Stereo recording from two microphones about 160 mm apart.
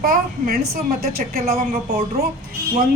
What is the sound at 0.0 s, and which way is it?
A man's voice, 65° right (ahead or behind).